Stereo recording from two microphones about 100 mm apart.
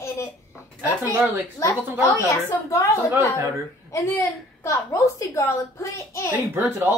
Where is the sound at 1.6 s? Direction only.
30° left (ahead or behind).